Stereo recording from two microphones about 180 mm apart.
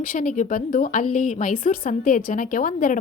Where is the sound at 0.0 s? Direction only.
50° left (ahead or behind).